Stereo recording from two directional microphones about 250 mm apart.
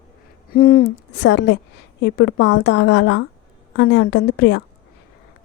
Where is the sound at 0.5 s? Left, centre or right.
Left.